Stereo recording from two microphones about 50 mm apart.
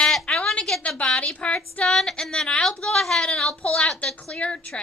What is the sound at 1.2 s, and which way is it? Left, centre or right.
Speech, left.